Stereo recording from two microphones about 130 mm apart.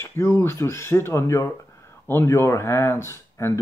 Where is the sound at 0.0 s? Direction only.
20° left (ahead or behind).